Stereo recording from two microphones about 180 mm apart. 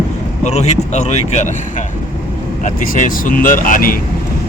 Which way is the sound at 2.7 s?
45° left (ahead or behind).